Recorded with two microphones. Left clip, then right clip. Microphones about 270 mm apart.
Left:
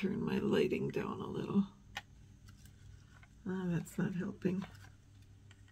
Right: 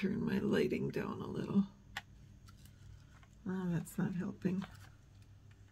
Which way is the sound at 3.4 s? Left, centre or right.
Centre.